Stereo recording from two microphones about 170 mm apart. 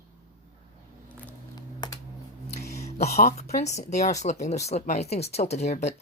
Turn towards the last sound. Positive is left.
turn(degrees=40)  # may be behind; listen again after turning